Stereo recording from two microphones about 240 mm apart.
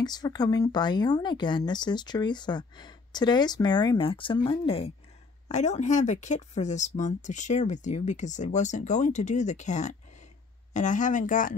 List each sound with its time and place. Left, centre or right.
0.0 s speech: centre; by 11.5 s left